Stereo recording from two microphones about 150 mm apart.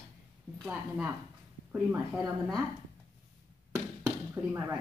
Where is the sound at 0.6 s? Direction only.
10° right (ahead or behind).